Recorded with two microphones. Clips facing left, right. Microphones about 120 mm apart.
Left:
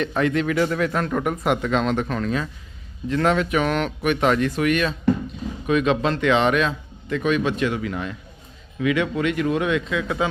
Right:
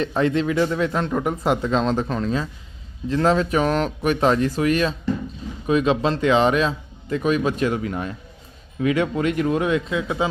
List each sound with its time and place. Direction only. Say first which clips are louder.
0.2 s a man's voice: right 1 dB; 30° right (ahead or behind)